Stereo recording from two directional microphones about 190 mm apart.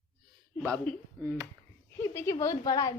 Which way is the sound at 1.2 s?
10° right (ahead or behind).